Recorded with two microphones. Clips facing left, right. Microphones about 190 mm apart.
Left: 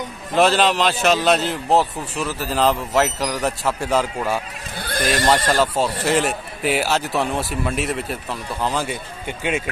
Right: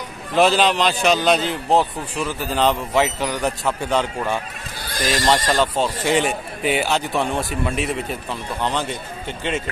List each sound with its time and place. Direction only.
0.3 s a man's voice: centre (ahead or behind)
4.8 s speech: 60° left (ahead or behind)
5.3 s a man's voice: 5° left (ahead or behind)